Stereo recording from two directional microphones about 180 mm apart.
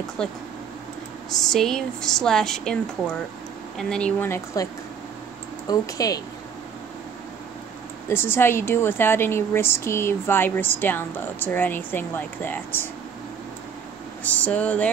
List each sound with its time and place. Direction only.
0.2 s speech: 5° left (ahead or behind)
1.4 s a woman's voice: centre (ahead or behind)
5.7 s speech: 20° left (ahead or behind)
8.1 s a woman's voice: 10° left (ahead or behind)
14.2 s a woman's voice: 10° left (ahead or behind)